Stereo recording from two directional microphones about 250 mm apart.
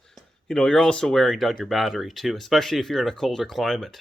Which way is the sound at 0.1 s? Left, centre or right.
Centre.